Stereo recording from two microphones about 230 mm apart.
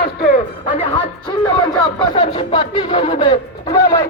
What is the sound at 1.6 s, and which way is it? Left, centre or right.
Speech, left.